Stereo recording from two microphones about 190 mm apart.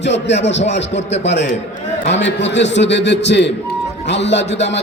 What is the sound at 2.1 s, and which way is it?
A man's voice, 70° left (ahead or behind).